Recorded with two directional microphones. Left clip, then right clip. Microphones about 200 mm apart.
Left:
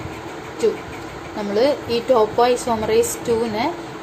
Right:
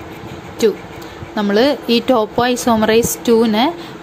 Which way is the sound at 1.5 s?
40° right (ahead or behind).